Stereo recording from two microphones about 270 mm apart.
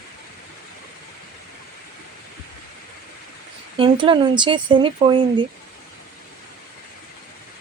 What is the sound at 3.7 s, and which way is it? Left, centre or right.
Speech, centre.